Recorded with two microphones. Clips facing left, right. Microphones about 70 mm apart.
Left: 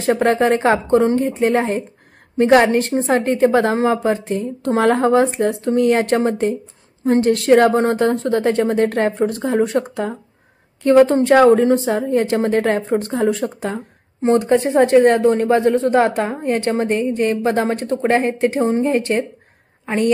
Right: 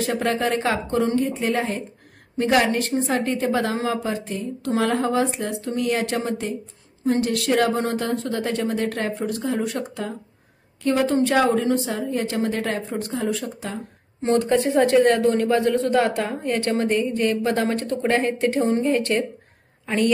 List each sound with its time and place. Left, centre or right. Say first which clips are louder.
0.0 s a woman's voice: left 7 dB; left
14.2 s speech: left 4 dB; centre